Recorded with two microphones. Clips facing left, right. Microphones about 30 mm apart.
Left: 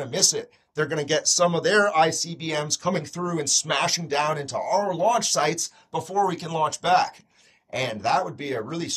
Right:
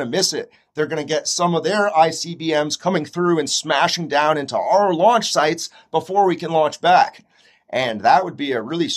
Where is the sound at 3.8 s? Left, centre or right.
Right.